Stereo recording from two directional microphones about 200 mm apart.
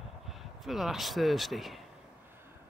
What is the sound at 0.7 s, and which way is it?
Speech, centre (ahead or behind).